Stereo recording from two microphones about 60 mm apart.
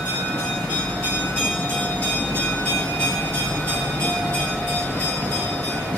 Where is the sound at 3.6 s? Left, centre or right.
Left.